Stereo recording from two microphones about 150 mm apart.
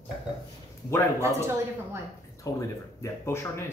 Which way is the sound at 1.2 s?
20° right (ahead or behind).